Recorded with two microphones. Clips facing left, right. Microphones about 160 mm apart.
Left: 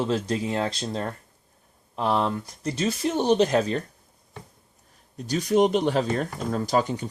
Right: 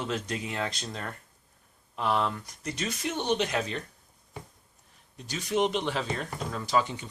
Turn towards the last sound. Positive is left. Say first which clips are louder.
# left 4 dB
turn(degrees=40)  # may be behind; listen again after turning